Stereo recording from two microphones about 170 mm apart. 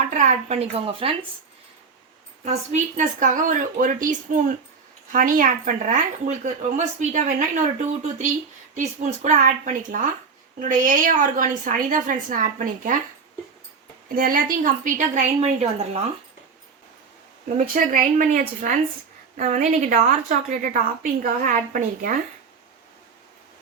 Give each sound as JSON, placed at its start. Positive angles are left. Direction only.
{"t": 0.3, "sound": "speech", "side_deg": -40}
{"t": 2.4, "sound": "speech", "side_deg": -45}
{"t": 14.2, "sound": "speech", "side_deg": -55}
{"t": 17.7, "sound": "speech", "side_deg": -50}